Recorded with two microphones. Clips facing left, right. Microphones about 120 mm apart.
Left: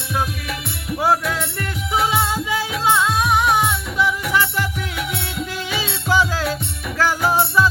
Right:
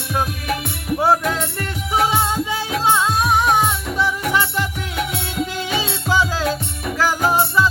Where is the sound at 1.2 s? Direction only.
40° right (ahead or behind).